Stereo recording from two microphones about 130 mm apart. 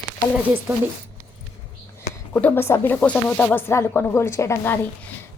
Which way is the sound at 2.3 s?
15° left (ahead or behind).